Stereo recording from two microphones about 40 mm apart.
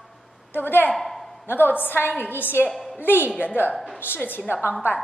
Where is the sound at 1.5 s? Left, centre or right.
Left.